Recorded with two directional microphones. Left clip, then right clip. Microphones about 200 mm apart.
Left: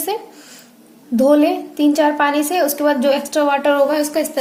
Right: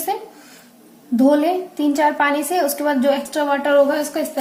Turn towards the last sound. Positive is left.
turn(degrees=55)  # may be behind; listen again after turning